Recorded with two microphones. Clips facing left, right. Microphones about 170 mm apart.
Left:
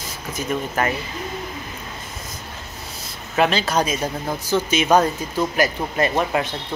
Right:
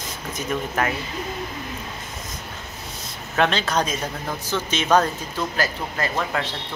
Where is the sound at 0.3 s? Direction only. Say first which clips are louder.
Left 2 dB; 5° left (ahead or behind).